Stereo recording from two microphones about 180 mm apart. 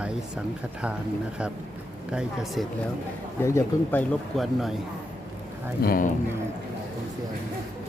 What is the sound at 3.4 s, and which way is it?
Speech, 15° left (ahead or behind).